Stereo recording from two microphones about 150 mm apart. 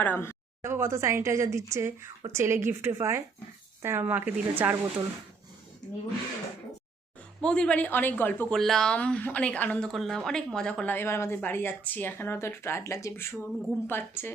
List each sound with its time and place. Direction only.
0.0 s speech: 15° left (ahead or behind)
0.6 s a woman's voice: 15° right (ahead or behind)
7.4 s speech: 5° left (ahead or behind)